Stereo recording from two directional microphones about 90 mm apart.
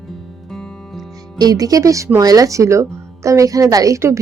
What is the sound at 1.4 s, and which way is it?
A woman's voice, 45° right (ahead or behind).